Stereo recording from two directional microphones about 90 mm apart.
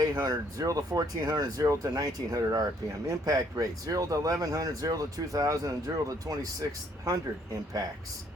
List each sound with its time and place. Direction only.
0.0 s speech: 45° right (ahead or behind)